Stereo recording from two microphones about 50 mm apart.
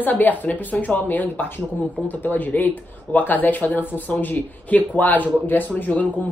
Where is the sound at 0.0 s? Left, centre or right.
Left.